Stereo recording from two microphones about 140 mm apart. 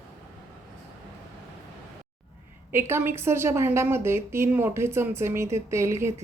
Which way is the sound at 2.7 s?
15° right (ahead or behind).